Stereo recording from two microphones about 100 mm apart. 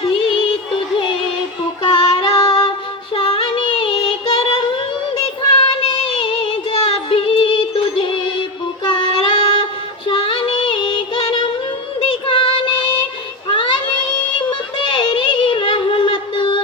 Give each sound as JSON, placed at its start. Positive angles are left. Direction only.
{"t": 0.0, "sound": "music", "side_deg": 65}
{"t": 1.8, "sound": "female singing", "side_deg": 60}
{"t": 3.2, "sound": "child singing", "side_deg": 65}
{"t": 5.8, "sound": "music", "side_deg": 65}
{"t": 8.8, "sound": "child singing", "side_deg": 55}
{"t": 14.8, "sound": "music", "side_deg": 55}